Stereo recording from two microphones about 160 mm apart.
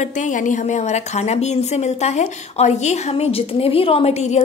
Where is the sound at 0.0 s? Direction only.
50° left (ahead or behind).